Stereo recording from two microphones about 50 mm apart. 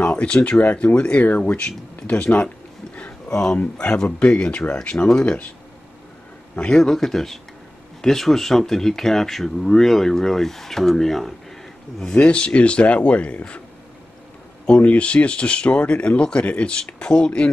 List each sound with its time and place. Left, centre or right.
0.0 s speech: left
3.3 s speech: centre
3.8 s speech: left
5.2 s speech: left
6.5 s a man's voice: left
6.8 s speech: centre
12.2 s speech: left
14.7 s speech: left